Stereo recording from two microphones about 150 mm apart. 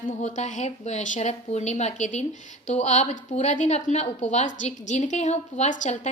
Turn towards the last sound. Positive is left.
turn(degrees=55)  # may be behind; listen again after turning